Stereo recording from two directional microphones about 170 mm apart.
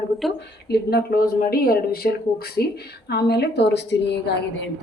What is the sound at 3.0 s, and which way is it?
A woman's voice, 75° left (ahead or behind).